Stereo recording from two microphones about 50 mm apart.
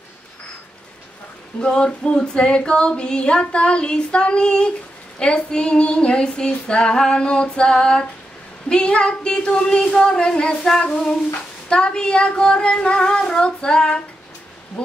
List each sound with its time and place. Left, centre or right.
1.6 s female singing: centre
8.6 s speech: centre
10.8 s female singing: centre